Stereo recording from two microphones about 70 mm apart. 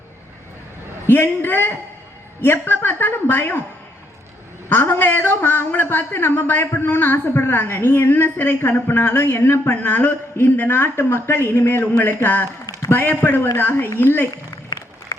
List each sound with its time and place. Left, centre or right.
1.0 s a man's voice: left
4.7 s a man's voice: left
14.7 s applause: left